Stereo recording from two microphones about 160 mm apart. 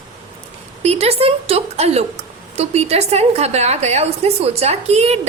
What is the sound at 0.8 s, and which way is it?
A woman's voice, 40° right (ahead or behind).